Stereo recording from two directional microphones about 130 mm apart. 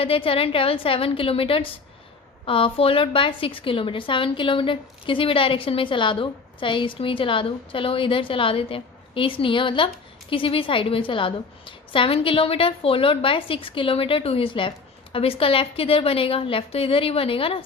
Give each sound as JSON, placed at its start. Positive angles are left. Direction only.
{"t": 0.0, "sound": "a woman's voice", "side_deg": 45}